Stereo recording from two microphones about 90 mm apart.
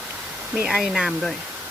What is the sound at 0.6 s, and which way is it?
Speech, 5° right (ahead or behind).